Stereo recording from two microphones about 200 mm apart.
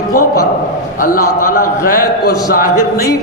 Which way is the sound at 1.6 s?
45° left (ahead or behind).